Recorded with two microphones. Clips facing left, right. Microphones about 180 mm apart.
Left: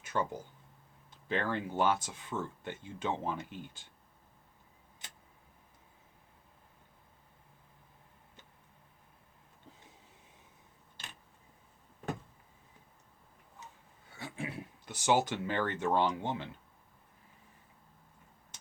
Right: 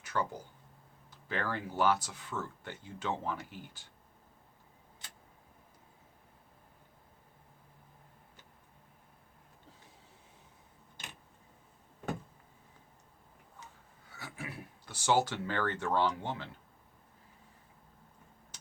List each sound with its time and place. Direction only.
0.0 s a sound: 25° left (ahead or behind)
1.1 s speech: 20° left (ahead or behind)
5.0 s tick-tock: 20° left (ahead or behind)
14.2 s speech: 25° left (ahead or behind)